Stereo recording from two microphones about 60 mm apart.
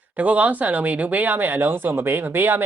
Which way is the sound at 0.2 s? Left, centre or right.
Right.